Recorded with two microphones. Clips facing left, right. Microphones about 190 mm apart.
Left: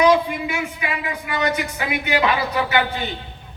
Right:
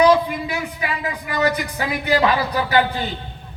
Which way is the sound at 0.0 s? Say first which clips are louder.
Right 1 dB; 35° right (ahead or behind).